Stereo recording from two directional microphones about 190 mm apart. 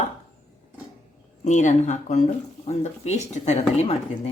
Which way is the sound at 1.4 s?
40° left (ahead or behind).